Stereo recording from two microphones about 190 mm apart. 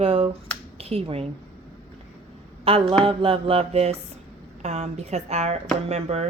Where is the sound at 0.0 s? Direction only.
30° right (ahead or behind).